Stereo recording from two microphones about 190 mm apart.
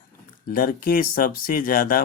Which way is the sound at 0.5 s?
50° left (ahead or behind).